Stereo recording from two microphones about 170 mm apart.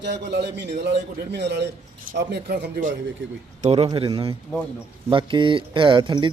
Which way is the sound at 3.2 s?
90° right.